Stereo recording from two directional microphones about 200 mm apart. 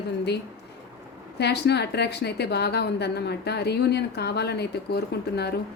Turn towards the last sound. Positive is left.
turn(degrees=55)  # may be behind; listen again after turning